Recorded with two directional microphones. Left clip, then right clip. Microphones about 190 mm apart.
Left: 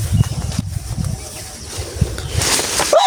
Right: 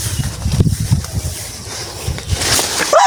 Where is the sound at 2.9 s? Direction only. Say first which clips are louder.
Right 3 dB; 15° left (ahead or behind).